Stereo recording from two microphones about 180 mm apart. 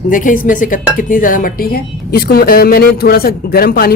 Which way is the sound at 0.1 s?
50° left (ahead or behind).